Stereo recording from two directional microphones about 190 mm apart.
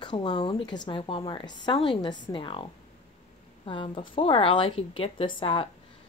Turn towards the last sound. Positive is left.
turn(degrees=25)  # may be behind; listen again after turning